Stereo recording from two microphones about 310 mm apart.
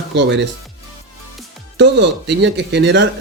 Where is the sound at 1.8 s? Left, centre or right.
Right.